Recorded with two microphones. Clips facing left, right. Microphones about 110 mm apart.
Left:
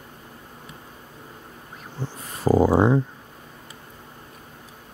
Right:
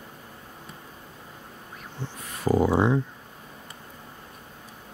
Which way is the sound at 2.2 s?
35° left (ahead or behind).